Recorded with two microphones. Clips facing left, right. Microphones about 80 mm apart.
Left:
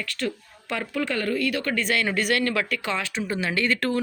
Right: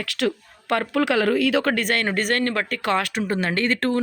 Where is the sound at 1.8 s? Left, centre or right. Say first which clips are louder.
Right 2 dB; right.